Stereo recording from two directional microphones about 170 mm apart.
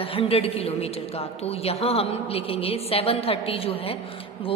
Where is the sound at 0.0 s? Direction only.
35° left (ahead or behind).